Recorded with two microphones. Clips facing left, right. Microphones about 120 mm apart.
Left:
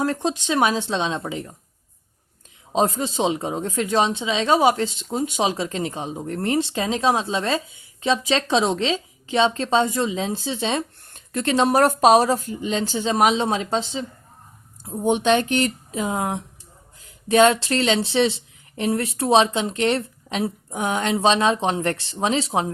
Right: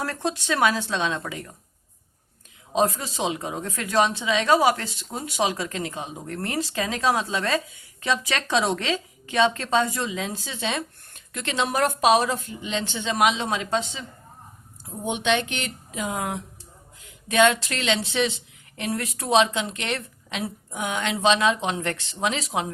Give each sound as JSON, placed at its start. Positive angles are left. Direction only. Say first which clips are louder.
{"t": 0.0, "sound": "speech", "louder": "left 5 dB", "side_deg": 20}
{"t": 2.7, "sound": "speech", "louder": "left 2 dB", "side_deg": 25}
{"t": 15.0, "sound": "speech", "louder": "left 6 dB", "side_deg": 40}